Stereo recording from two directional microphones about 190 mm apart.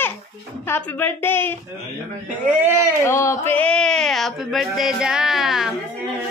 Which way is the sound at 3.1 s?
15° left (ahead or behind).